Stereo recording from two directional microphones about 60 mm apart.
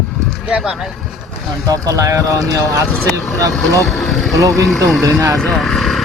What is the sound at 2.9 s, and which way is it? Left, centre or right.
Speech, centre.